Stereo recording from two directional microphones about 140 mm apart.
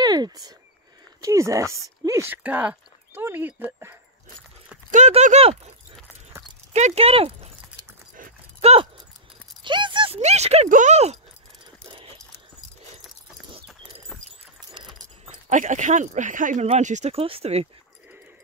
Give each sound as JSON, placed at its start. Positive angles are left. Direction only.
{"t": 0.0, "sound": "speech", "side_deg": -30}
{"t": 2.4, "sound": "speech", "side_deg": -10}
{"t": 4.9, "sound": "speech", "side_deg": -55}
{"t": 6.7, "sound": "speech", "side_deg": -50}
{"t": 8.5, "sound": "speech", "side_deg": -50}
{"t": 9.6, "sound": "speech", "side_deg": -35}
{"t": 10.7, "sound": "speech", "side_deg": -60}
{"t": 14.7, "sound": "keys jangling", "side_deg": -35}
{"t": 15.2, "sound": "speech", "side_deg": -60}
{"t": 16.6, "sound": "speech", "side_deg": -55}